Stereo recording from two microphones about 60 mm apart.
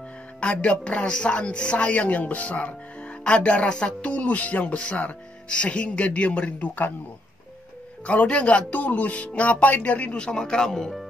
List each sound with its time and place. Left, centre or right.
0.4 s speech: centre
8.1 s speech: left; by 11.1 s centre